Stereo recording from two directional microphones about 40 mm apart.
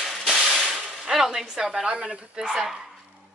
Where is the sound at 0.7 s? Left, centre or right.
Centre.